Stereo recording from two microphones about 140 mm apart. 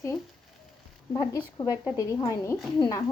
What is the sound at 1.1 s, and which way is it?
Speech, 25° left (ahead or behind).